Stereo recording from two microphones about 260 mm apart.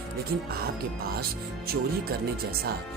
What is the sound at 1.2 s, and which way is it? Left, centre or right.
Speech, right.